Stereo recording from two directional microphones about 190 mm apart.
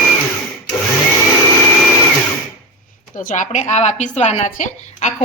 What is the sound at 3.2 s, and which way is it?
Speech, 45° left (ahead or behind).